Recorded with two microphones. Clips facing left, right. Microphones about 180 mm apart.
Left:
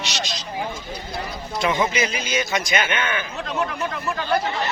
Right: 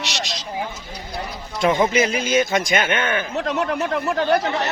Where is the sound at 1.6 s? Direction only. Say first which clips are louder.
Right 4 dB; 45° right (ahead or behind).